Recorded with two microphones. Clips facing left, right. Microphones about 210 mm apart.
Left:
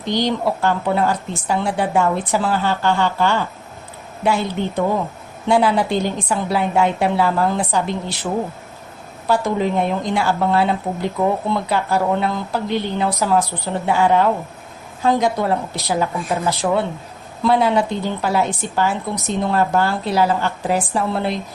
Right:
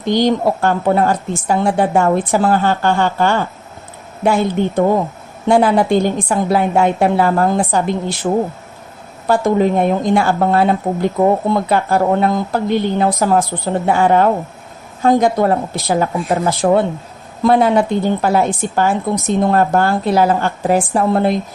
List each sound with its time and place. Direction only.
0.0 s a woman's voice: 50° right (ahead or behind)